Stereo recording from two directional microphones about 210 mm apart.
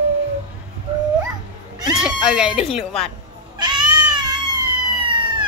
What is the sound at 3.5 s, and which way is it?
Cat, 20° right (ahead or behind).